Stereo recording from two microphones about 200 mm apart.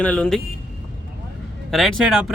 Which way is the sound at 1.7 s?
Centre (ahead or behind).